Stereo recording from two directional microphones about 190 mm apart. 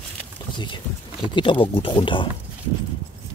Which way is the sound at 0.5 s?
25° left (ahead or behind).